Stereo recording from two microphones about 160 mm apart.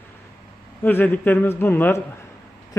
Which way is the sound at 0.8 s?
15° left (ahead or behind).